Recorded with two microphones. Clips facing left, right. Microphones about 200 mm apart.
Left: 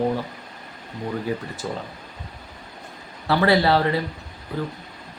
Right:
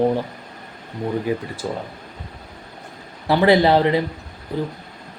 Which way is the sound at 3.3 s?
20° right (ahead or behind).